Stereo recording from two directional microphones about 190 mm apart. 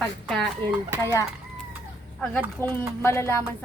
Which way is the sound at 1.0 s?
15° left (ahead or behind).